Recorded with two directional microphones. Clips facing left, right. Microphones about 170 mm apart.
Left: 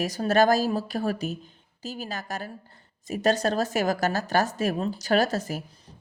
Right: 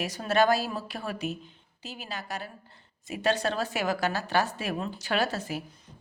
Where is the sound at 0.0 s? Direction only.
40° left (ahead or behind).